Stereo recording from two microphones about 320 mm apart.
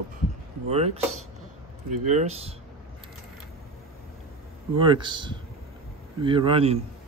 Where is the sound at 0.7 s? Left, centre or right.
Centre.